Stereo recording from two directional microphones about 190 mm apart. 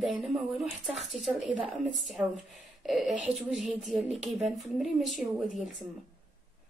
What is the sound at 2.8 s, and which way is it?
Speech, centre (ahead or behind).